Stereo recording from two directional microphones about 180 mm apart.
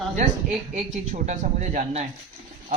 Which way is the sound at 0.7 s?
40° right (ahead or behind).